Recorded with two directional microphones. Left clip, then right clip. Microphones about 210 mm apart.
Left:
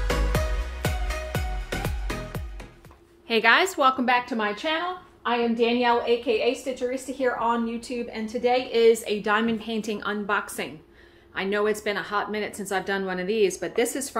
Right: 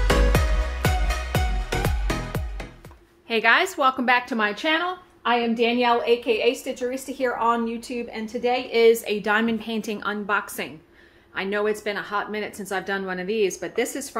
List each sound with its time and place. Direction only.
0.3 s music: centre (ahead or behind)
3.3 s a woman's voice: 5° left (ahead or behind)
4.0 s a woman's voice: 10° right (ahead or behind)
4.4 s a woman's voice: 30° right (ahead or behind); by 14.0 s 5° right (ahead or behind)